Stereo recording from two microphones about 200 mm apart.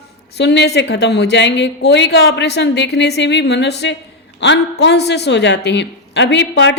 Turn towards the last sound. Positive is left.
turn(degrees=60)  # may be behind; listen again after turning